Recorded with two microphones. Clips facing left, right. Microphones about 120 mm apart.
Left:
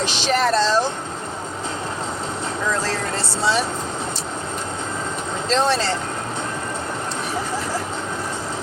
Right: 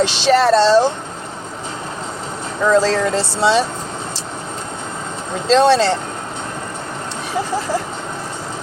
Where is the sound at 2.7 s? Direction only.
90° right.